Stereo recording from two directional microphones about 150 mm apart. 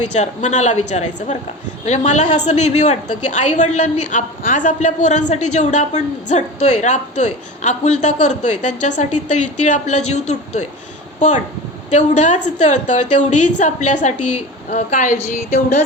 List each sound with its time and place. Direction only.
0.2 s a woman's voice: 50° left (ahead or behind)